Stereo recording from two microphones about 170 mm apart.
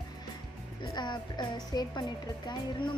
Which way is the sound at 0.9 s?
25° left (ahead or behind).